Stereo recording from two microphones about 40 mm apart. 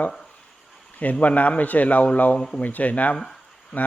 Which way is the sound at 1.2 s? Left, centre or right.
Left.